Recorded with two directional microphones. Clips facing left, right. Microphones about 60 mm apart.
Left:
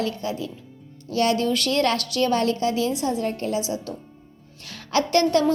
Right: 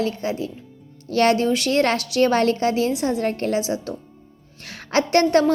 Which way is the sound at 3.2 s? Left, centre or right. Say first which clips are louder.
Right 3 dB; right.